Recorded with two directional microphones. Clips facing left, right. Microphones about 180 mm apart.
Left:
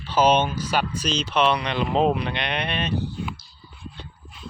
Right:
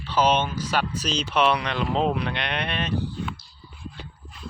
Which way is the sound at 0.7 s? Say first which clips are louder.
Left 1 dB; centre (ahead or behind).